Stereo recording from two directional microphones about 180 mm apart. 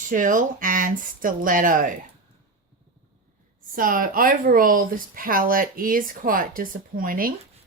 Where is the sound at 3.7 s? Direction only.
50° right (ahead or behind).